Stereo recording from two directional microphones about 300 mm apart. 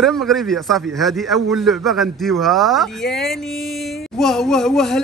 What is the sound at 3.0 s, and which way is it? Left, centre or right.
Speech, left.